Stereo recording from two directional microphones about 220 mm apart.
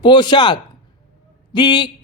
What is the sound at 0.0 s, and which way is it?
A woman's voice, 20° left (ahead or behind).